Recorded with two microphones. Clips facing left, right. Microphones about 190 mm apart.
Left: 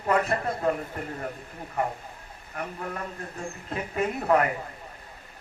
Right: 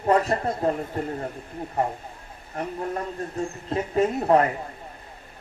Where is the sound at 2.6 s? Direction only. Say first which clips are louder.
Right 5 dB; 30° right (ahead or behind).